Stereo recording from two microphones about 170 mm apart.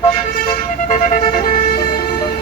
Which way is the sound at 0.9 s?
45° left (ahead or behind).